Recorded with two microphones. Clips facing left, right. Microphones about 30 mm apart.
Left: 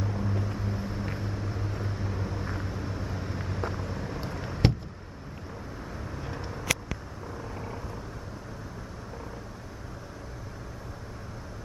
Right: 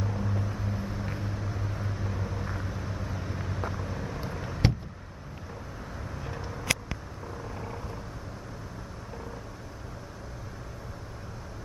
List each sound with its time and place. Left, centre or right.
0.0 s vehicle: centre
6.0 s vehicle: centre
6.6 s a sound: centre
7.2 s vehicle: centre